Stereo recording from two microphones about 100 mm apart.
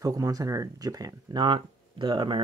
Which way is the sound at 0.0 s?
35° right (ahead or behind).